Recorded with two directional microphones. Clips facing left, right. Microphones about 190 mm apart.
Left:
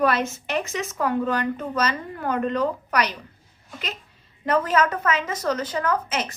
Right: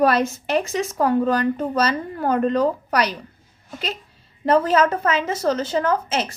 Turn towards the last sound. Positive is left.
turn(degrees=-30)  # may be behind; listen again after turning